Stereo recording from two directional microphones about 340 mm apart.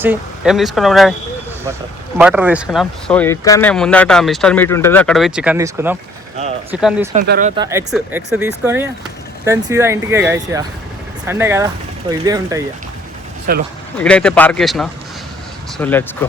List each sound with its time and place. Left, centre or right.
0.0 s speech: centre
2.1 s speech: centre
7.1 s speech: right
13.5 s speech: right
14.0 s speech: centre